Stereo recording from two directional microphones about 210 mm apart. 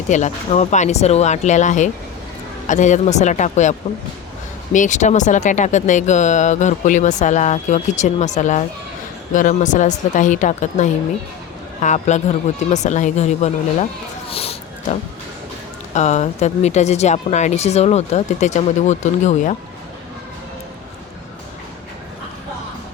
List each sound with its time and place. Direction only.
0.1 s speech: 35° left (ahead or behind)
14.3 s a sound: 30° left (ahead or behind)
16.0 s speech: 35° left (ahead or behind)